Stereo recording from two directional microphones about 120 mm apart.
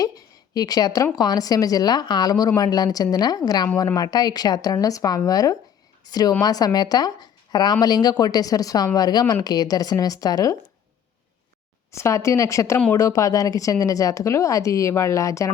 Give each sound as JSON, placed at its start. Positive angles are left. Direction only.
{"t": 0.5, "sound": "a woman's voice", "side_deg": 30}
{"t": 11.9, "sound": "a woman's voice", "side_deg": 25}